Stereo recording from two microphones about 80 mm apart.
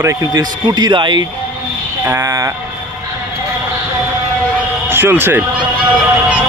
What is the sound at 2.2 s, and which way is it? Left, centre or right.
Speech, right.